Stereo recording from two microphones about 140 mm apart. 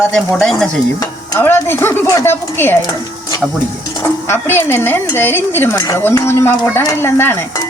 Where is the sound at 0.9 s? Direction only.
20° left (ahead or behind).